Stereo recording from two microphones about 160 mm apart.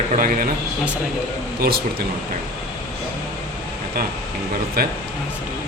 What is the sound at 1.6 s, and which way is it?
Speech, 75° right (ahead or behind).